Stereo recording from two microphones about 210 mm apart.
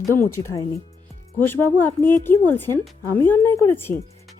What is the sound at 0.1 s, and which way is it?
Speech, 10° left (ahead or behind).